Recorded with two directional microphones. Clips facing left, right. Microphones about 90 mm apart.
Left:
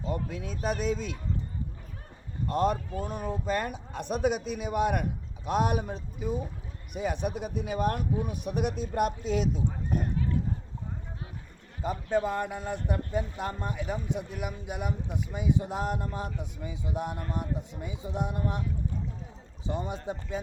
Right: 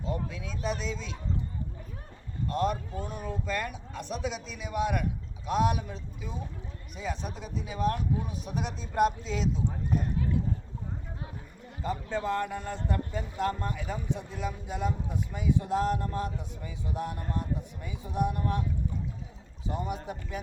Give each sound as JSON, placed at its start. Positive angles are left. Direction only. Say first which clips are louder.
{"t": 0.3, "sound": "speech", "louder": "left 2 dB", "side_deg": 50}
{"t": 2.5, "sound": "speech", "louder": "left 2 dB", "side_deg": 45}
{"t": 11.8, "sound": "a man's voice", "louder": "left 4 dB", "side_deg": 20}
{"t": 19.6, "sound": "speech", "louder": "left 1 dB", "side_deg": 25}